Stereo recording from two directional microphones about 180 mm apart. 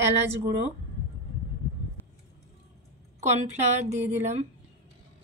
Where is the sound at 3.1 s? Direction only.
40° right (ahead or behind).